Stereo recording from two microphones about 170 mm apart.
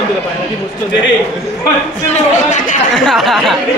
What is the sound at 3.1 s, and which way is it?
Speech, centre (ahead or behind).